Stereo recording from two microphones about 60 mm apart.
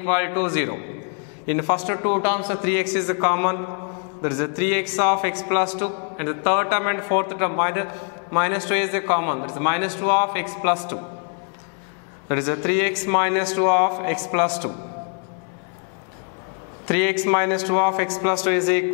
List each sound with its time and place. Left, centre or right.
0.0 s a man's voice: centre
12.3 s a man's voice: centre
16.8 s a man's voice: centre